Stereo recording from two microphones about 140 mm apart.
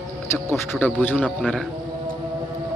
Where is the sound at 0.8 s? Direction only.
15° left (ahead or behind).